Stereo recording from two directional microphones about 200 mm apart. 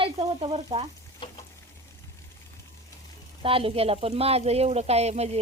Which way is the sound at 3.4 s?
25° right (ahead or behind).